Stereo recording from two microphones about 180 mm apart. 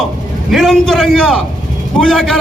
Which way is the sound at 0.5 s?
Centre (ahead or behind).